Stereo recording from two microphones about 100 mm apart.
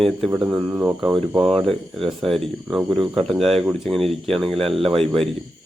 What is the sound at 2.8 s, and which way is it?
Speech, 55° right (ahead or behind).